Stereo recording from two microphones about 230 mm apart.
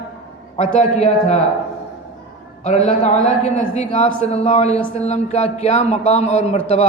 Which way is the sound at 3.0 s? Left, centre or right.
Left.